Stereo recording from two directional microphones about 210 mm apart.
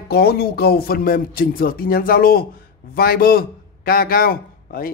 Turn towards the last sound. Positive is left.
turn(degrees=45)  # may be behind; listen again after turning